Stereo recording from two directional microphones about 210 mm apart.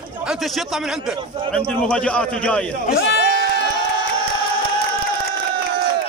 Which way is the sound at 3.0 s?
55° left (ahead or behind).